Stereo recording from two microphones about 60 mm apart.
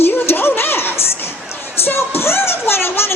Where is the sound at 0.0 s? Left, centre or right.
Left.